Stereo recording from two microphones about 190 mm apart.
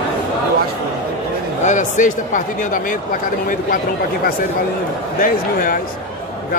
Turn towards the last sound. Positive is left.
turn(degrees=45)  # may be behind; listen again after turning